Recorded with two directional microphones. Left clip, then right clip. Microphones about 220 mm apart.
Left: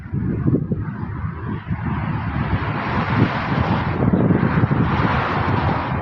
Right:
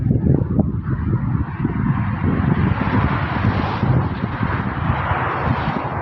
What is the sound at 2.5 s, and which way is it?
Vehicle, 50° left (ahead or behind).